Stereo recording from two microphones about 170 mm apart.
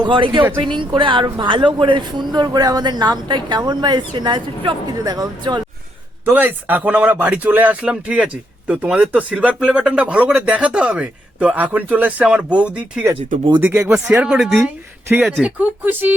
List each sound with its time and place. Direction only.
0.0 s speech: 25° right (ahead or behind)
6.2 s speech: 10° right (ahead or behind)